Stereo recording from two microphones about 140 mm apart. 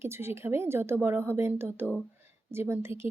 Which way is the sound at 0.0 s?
15° right (ahead or behind).